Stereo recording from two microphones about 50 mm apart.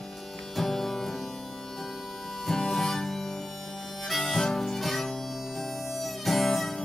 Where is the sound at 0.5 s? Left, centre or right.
Centre.